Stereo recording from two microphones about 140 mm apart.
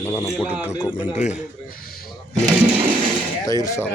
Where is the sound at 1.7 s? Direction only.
90° left.